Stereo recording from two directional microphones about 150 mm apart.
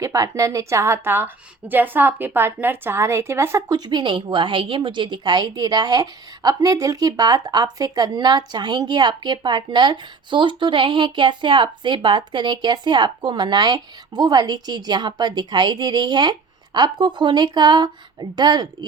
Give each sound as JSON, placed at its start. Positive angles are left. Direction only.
{"t": 0.0, "sound": "a woman's voice", "side_deg": -20}